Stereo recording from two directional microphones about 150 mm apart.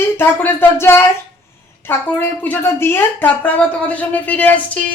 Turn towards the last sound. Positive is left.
turn(degrees=10)  # may be behind; listen again after turning